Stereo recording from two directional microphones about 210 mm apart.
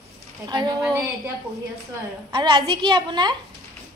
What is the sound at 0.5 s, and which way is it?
Speech, 20° right (ahead or behind).